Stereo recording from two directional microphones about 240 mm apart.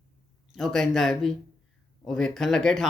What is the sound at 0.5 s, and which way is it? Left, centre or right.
Speech, centre.